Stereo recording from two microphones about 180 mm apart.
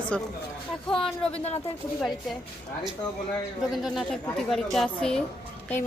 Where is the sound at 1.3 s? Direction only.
35° left (ahead or behind).